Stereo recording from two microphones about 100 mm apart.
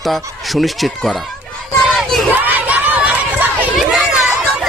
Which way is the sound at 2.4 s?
15° right (ahead or behind).